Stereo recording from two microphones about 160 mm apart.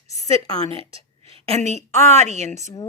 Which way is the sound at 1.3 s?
40° right (ahead or behind).